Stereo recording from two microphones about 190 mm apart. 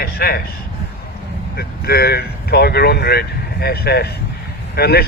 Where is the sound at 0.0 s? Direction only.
55° left (ahead or behind).